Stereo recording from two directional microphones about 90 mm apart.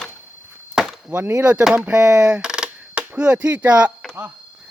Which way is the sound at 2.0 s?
35° right (ahead or behind).